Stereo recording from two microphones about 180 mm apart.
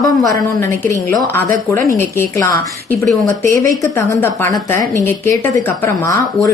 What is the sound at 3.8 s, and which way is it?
Speech, 15° left (ahead or behind).